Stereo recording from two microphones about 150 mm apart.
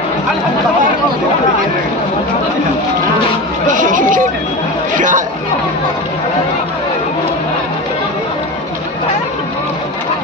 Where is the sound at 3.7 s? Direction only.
60° right (ahead or behind).